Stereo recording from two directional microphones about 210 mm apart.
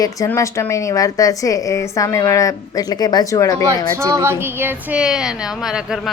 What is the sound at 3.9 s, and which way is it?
Speech, 15° right (ahead or behind).